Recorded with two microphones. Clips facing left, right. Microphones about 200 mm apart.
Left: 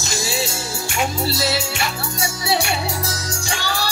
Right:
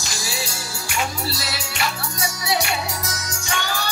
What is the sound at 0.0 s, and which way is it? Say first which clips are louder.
Music: left 6 dB; 25° left (ahead or behind).